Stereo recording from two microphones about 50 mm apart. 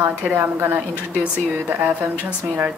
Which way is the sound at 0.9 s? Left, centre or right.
Right.